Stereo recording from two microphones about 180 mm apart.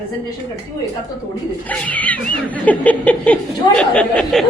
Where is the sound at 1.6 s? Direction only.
10° left (ahead or behind).